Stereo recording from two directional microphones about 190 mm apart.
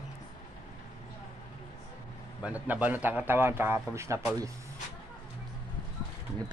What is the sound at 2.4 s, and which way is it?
A man's voice, 10° right (ahead or behind).